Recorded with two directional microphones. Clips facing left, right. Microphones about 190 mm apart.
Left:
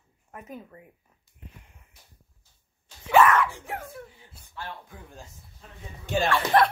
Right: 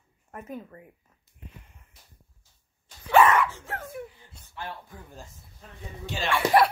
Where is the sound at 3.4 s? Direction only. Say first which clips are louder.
Even; 15° left (ahead or behind).